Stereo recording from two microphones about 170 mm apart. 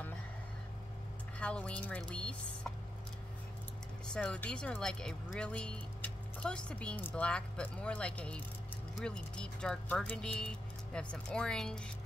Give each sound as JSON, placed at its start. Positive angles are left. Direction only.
{"t": 1.4, "sound": "speech", "side_deg": 5}
{"t": 4.1, "sound": "speech", "side_deg": 5}